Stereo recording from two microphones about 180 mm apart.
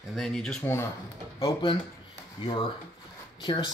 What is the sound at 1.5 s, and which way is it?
Speech, 25° left (ahead or behind).